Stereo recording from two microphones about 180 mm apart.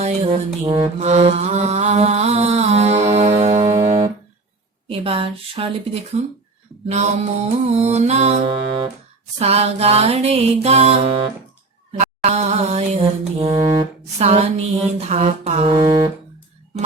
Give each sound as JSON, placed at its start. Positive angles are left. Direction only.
{"t": 0.0, "sound": "mantra", "side_deg": -40}
{"t": 11.9, "sound": "music", "side_deg": -40}
{"t": 14.2, "sound": "mantra", "side_deg": -35}